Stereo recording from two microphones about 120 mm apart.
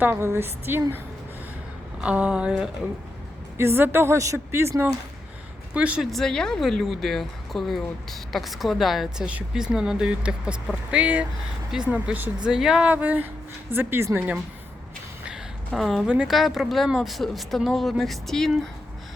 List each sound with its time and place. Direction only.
0.0 s a woman's voice: 20° right (ahead or behind)
2.0 s speech: 10° right (ahead or behind)
3.6 s a woman's voice: 20° right (ahead or behind)
5.7 s speech: 10° right (ahead or behind)
6.1 s a woman's voice: 5° left (ahead or behind); by 14.3 s 15° right (ahead or behind)
15.7 s speech: centre (ahead or behind)